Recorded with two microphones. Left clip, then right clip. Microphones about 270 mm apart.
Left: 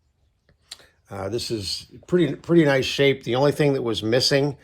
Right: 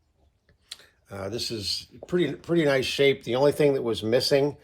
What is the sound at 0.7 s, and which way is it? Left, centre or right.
Speech, left.